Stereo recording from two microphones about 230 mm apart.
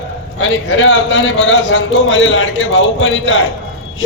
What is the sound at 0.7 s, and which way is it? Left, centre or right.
A man's voice, left.